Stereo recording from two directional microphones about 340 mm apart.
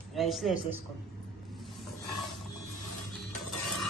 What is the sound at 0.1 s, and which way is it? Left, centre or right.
Speech, centre.